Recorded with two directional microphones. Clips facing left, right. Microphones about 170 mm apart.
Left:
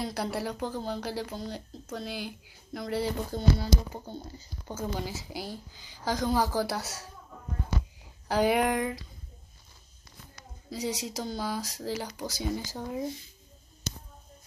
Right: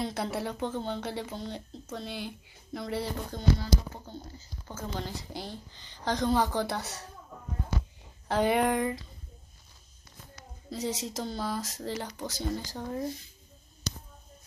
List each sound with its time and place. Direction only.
0.0 s speech: centre (ahead or behind)
3.7 s a sound: 15° left (ahead or behind)
4.6 s speech: 10° left (ahead or behind)
8.3 s speech: 5° left (ahead or behind)
10.7 s speech: centre (ahead or behind)
12.7 s a sound: 5° left (ahead or behind)